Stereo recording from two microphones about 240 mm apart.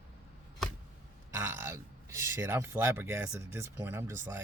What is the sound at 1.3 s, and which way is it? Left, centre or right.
Speech, centre.